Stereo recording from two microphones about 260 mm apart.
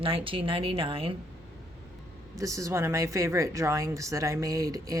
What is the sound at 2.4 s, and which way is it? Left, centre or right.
Speech, centre.